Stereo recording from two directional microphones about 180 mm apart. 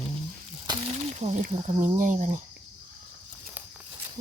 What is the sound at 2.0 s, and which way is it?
Cricket, 45° right (ahead or behind).